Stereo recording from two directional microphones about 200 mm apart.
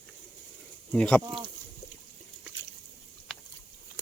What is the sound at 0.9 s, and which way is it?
Speech, 5° left (ahead or behind).